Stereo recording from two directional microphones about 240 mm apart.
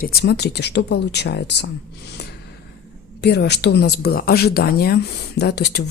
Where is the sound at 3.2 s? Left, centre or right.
Left.